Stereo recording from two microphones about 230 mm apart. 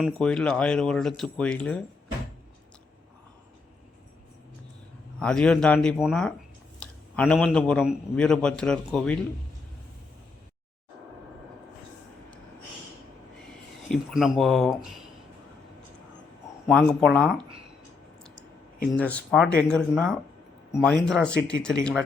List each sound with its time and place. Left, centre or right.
0.0 s a man's voice: centre
5.2 s a man's voice: centre
13.8 s a man's voice: centre
16.6 s a man's voice: centre
18.9 s a man's voice: centre